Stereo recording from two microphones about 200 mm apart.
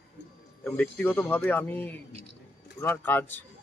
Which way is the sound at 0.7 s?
10° left (ahead or behind).